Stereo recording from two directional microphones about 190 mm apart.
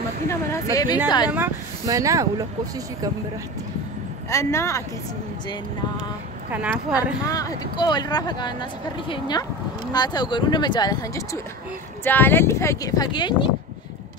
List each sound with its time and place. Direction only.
0.3 s speech: 15° left (ahead or behind)
1.3 s speech: 15° right (ahead or behind)
4.3 s speech: 15° left (ahead or behind)
6.5 s a woman's voice: 5° right (ahead or behind)
7.2 s speech: 20° left (ahead or behind)